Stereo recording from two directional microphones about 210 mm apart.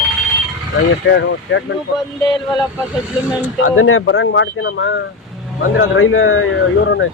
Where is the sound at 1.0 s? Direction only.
60° left (ahead or behind).